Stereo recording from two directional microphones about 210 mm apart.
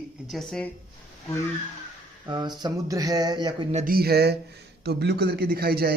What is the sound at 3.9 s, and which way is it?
A man's voice, 50° right (ahead or behind).